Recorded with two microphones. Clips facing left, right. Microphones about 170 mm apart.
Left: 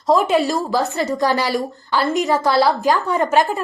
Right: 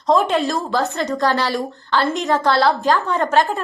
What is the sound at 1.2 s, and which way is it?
Speech, 15° left (ahead or behind).